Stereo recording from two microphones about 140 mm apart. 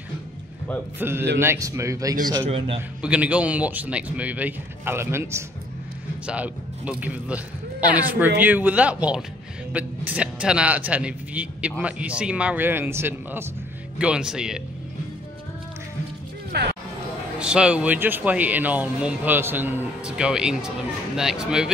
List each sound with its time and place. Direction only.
0.9 s a man's voice: 15° right (ahead or behind)
2.5 s a man's voice: 40° right (ahead or behind)
3.0 s speech: 10° right (ahead or behind)
13.9 s speech: 5° right (ahead or behind)
17.4 s speech: 5° right (ahead or behind)